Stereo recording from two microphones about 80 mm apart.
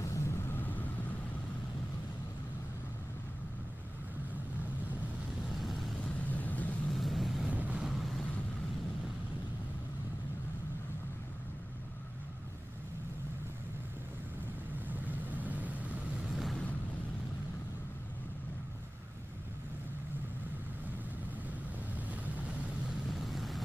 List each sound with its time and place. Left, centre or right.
0.0 s vehicle: left
5.6 s vehicle: centre
6.1 s vehicle: centre
6.9 s vehicle: centre
7.4 s boat: centre
7.8 s vehicle: centre
14.9 s vehicle: right
16.3 s boat: centre
22.8 s vehicle: centre